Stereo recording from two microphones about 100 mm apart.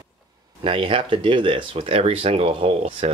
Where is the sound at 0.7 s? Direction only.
60° right (ahead or behind).